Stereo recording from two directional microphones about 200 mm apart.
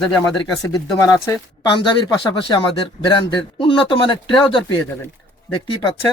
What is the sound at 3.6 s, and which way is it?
Speech, 25° left (ahead or behind).